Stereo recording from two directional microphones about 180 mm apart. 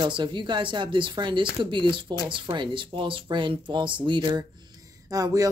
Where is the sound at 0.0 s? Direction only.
25° right (ahead or behind).